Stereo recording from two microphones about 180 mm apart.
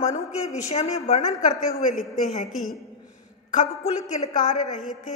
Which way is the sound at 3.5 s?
40° left (ahead or behind).